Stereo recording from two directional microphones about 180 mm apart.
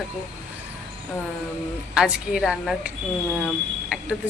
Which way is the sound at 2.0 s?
5° right (ahead or behind).